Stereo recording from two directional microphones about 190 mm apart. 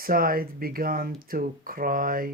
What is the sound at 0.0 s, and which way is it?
Speech, 50° right (ahead or behind).